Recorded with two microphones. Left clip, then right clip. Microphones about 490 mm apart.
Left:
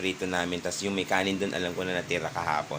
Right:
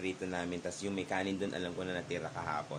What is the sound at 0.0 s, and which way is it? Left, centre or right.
Speech, right.